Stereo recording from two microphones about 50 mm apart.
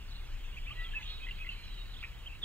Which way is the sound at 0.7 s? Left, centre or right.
Left.